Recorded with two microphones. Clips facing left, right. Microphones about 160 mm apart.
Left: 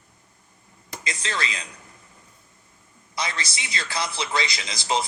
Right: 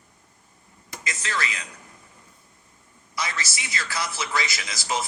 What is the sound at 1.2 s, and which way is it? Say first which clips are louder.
Speech: even; 20° left (ahead or behind).